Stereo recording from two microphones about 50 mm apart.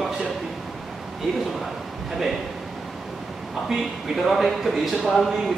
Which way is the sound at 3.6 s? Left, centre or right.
Centre.